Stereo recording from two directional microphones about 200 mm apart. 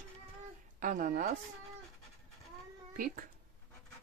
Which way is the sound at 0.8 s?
40° right (ahead or behind).